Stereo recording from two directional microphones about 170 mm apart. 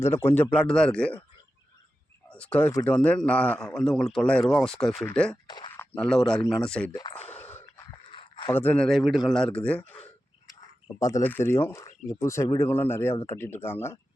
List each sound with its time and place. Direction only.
0.0 s speech: 15° left (ahead or behind)
2.3 s speech: 5° left (ahead or behind)
5.5 s a sound: 25° left (ahead or behind)
5.7 s speech: 10° left (ahead or behind)
6.9 s speech: 30° left (ahead or behind)
7.3 s a sound: 10° left (ahead or behind)
8.1 s a sound: 30° left (ahead or behind)
8.5 s speech: 10° left (ahead or behind)
11.0 s speech: 15° left (ahead or behind)